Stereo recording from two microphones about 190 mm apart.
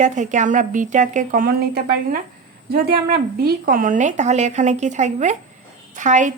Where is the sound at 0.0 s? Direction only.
40° right (ahead or behind).